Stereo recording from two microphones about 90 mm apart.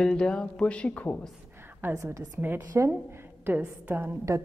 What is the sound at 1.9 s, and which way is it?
Speech, 35° right (ahead or behind).